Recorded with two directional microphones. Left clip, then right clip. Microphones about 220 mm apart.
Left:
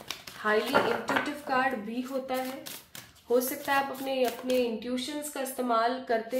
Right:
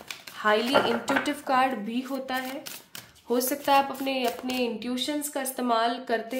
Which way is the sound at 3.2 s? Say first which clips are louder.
Right 3 dB; 40° right (ahead or behind).